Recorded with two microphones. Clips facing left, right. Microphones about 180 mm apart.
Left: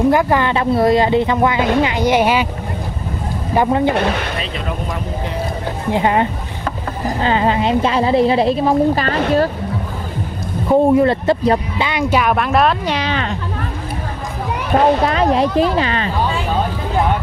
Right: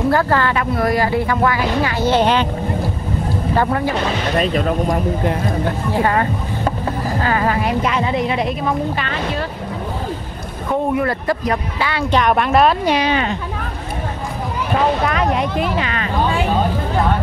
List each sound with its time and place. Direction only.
0.1 s speech: 15° left (ahead or behind)
3.5 s speech: 20° left (ahead or behind)
4.4 s speech: 45° right (ahead or behind)
5.9 s a woman's voice: 20° left (ahead or behind); by 9.5 s 40° left (ahead or behind)
10.7 s speech: 30° left (ahead or behind)
11.9 s speech: 15° left (ahead or behind)
12.2 s speech: centre (ahead or behind)
12.8 s speech: 10° right (ahead or behind)
15.0 s a woman's voice: 30° left (ahead or behind)